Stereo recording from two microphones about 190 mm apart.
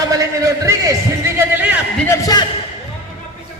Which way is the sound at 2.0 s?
15° left (ahead or behind).